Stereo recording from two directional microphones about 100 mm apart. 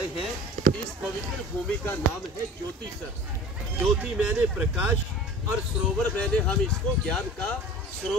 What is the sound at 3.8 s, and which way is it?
Speech, 10° right (ahead or behind).